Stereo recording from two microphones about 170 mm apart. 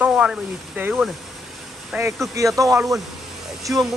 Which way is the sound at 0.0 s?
5° right (ahead or behind).